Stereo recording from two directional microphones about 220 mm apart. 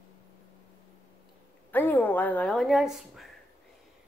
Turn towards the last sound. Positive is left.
turn(degrees=0)  # may be behind; listen again after turning